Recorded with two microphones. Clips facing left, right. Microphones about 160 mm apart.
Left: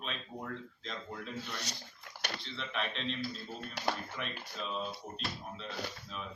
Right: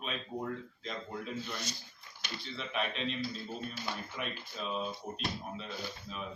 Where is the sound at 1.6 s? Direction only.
70° left (ahead or behind).